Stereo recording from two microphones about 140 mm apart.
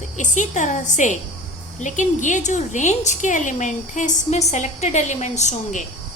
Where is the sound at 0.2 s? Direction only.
60° left (ahead or behind).